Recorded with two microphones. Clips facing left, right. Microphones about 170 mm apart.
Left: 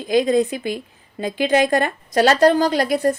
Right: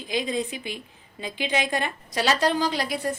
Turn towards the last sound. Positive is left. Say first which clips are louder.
# left 8 dB
turn(degrees=50)  # may be behind; listen again after turning